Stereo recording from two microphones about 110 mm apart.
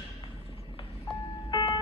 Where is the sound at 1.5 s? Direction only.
45° left (ahead or behind).